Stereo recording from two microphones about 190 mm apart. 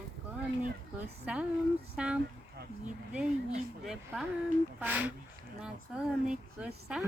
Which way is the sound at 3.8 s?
Centre (ahead or behind).